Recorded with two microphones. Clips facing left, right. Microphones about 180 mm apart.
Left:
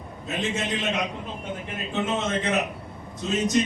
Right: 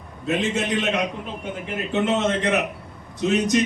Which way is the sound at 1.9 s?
70° right (ahead or behind).